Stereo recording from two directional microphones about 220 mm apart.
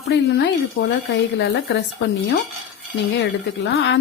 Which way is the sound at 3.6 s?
55° left (ahead or behind).